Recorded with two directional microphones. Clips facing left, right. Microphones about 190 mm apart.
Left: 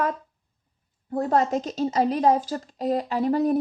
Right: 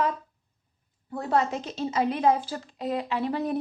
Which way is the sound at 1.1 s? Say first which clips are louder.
Left 4 dB; 45° left (ahead or behind).